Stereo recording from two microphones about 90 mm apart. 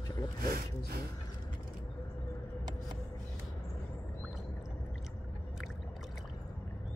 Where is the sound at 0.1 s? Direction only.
50° left (ahead or behind).